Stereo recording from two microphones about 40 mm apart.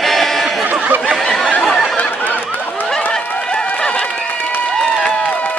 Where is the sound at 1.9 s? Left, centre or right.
Left.